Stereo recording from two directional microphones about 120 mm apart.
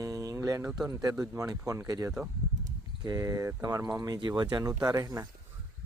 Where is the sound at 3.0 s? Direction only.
30° right (ahead or behind).